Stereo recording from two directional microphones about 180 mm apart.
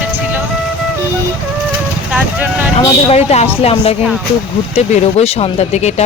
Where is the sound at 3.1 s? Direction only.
35° left (ahead or behind).